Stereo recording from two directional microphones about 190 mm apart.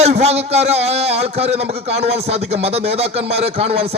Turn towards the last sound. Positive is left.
turn(degrees=-30)  # may be behind; listen again after turning